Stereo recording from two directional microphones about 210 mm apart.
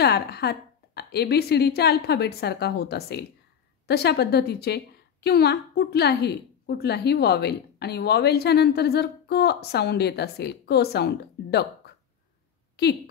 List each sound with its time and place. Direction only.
0.0 s a woman's voice: 50° left (ahead or behind)